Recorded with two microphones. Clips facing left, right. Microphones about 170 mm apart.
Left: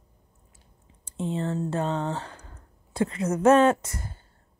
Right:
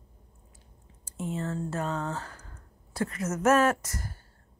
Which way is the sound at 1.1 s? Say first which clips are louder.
Left 4 dB; 30° left (ahead or behind).